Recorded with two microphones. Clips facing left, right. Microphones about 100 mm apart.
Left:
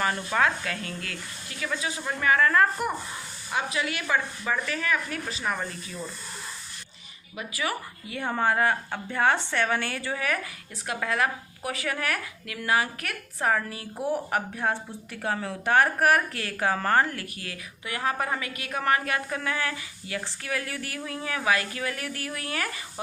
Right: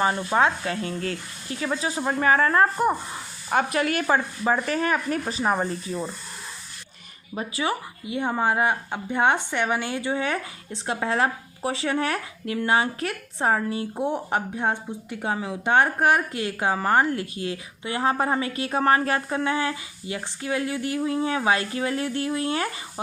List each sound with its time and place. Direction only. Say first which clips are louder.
0.0 s speech: right 4 dB; 25° right (ahead or behind)
3.5 s speech: right 6 dB; 50° right (ahead or behind); by 6.1 s 35° right (ahead or behind)
7.3 s a woman's voice: right 4 dB; 25° right (ahead or behind)